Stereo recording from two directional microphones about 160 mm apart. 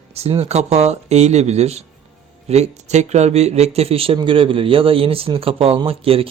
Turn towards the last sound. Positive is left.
turn(degrees=-35)  # may be behind; listen again after turning